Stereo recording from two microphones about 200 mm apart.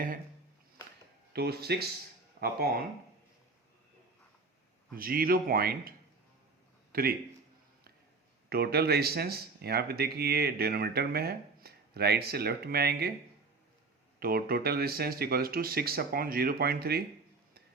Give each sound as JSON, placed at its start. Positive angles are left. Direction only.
{"t": 1.3, "sound": "speech", "side_deg": -55}
{"t": 4.9, "sound": "speech", "side_deg": -50}
{"t": 6.9, "sound": "speech", "side_deg": -50}
{"t": 8.4, "sound": "speech", "side_deg": -50}
{"t": 14.2, "sound": "speech", "side_deg": -50}